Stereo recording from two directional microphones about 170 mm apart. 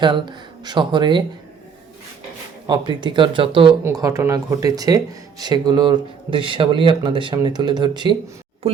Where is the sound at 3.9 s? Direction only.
20° right (ahead or behind).